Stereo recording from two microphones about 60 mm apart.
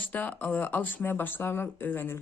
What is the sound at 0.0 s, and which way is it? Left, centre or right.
Speech, left.